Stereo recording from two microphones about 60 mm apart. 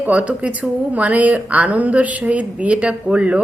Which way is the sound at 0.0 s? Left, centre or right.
Right.